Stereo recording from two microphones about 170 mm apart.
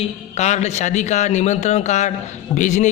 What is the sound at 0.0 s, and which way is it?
A man's voice, 40° left (ahead or behind).